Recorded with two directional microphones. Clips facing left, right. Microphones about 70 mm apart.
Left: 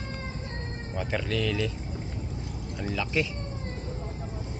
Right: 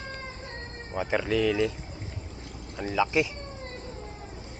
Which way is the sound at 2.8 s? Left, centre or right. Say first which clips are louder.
Right 4 dB; centre.